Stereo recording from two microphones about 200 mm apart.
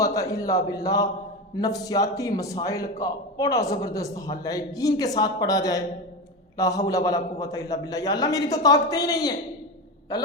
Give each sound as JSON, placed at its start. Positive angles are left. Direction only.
{"t": 0.0, "sound": "a man's voice", "side_deg": 15}